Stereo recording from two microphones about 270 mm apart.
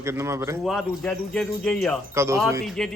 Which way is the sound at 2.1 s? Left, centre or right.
Centre.